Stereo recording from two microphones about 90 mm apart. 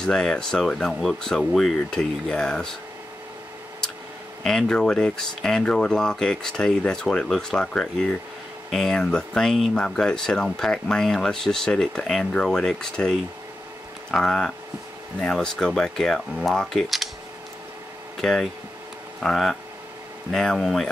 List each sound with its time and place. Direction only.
0.0 s speech: 5° left (ahead or behind)
4.4 s speech: 5° left (ahead or behind)
18.1 s speech: 5° left (ahead or behind)